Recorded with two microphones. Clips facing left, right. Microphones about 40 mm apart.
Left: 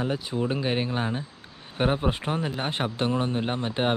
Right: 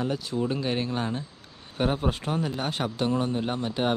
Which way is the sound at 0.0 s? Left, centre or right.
Centre.